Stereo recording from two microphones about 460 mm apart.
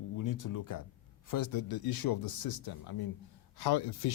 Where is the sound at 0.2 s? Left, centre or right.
Left.